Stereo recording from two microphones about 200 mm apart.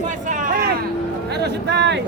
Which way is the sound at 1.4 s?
55° right (ahead or behind).